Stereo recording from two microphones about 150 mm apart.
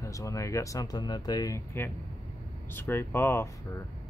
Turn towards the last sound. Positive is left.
turn(degrees=15)  # may be behind; listen again after turning